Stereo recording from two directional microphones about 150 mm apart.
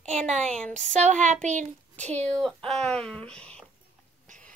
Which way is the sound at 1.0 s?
55° right (ahead or behind).